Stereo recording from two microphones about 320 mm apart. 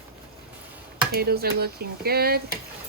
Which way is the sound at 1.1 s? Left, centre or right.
Right.